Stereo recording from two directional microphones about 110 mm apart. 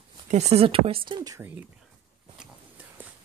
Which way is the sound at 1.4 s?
15° right (ahead or behind).